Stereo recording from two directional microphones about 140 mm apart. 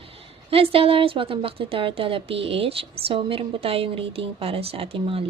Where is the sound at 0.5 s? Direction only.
40° right (ahead or behind).